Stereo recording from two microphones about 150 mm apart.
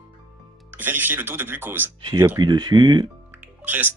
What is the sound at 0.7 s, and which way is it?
Speech, 10° right (ahead or behind).